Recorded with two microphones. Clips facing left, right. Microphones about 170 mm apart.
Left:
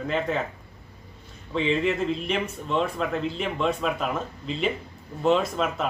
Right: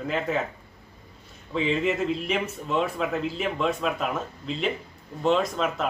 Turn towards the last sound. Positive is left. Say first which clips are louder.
# left 1 dB
turn(degrees=0)  # may be behind; listen again after turning